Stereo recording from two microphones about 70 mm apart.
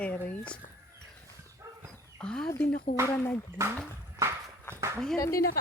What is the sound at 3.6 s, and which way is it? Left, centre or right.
Speech, right.